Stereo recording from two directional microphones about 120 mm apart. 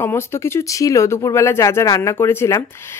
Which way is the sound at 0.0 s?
20° left (ahead or behind).